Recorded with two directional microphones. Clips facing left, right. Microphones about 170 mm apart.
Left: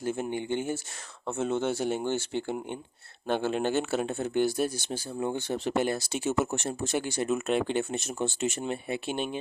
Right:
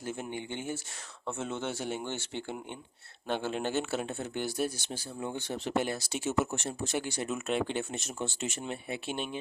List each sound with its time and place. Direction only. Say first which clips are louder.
0.0 s speech: left 6 dB; 45° left (ahead or behind)